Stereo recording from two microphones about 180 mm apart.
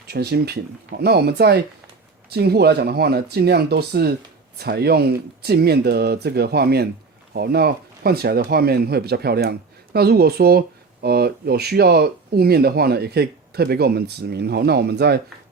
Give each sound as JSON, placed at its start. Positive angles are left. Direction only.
{"t": 0.1, "sound": "speech", "side_deg": -65}